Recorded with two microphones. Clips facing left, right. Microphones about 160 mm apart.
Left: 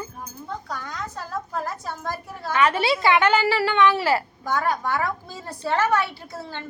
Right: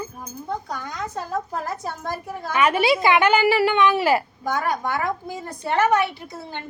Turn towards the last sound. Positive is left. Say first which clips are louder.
# right 1 dB
turn(degrees=-20)  # may be behind; listen again after turning